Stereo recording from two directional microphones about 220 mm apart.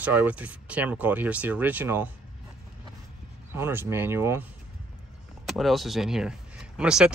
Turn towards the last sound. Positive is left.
turn(degrees=-5)  # may be behind; listen again after turning